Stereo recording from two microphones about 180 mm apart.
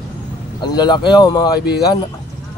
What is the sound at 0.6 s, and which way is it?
Speech, 25° left (ahead or behind).